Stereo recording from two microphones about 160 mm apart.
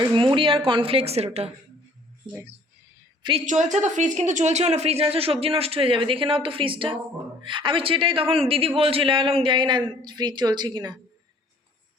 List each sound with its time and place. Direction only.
0.2 s a woman's voice: 35° right (ahead or behind)
3.4 s a man's voice: 50° right (ahead or behind); by 10.9 s 25° right (ahead or behind)